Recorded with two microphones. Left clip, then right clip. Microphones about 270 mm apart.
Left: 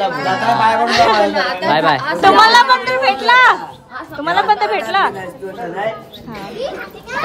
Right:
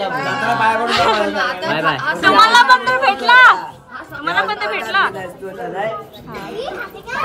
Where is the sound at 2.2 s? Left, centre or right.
Centre.